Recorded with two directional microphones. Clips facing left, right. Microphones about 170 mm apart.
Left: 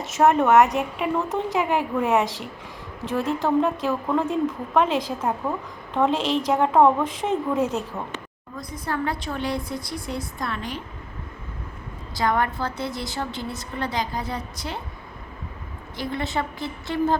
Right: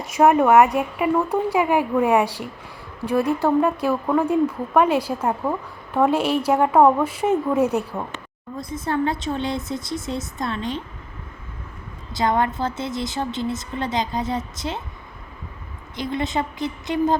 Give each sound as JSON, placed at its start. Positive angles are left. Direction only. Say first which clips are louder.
{"t": 0.2, "sound": "a woman's voice", "louder": "right 2 dB", "side_deg": -10}
{"t": 8.5, "sound": "a woman's voice", "louder": "right 5 dB", "side_deg": -25}
{"t": 12.1, "sound": "a woman's voice", "louder": "right 2 dB", "side_deg": -20}
{"t": 16.0, "sound": "a woman's voice", "louder": "right 3 dB", "side_deg": -20}